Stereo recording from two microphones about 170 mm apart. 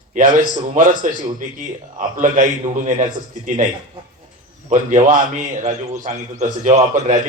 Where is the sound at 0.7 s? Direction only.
50° right (ahead or behind).